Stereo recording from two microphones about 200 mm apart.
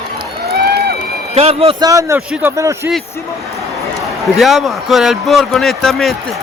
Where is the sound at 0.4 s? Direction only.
50° right (ahead or behind).